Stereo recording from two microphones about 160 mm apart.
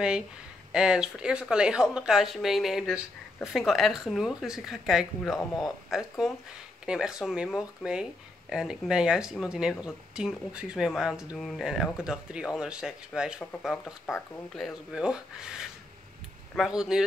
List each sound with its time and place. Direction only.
0.7 s speech: 5° right (ahead or behind)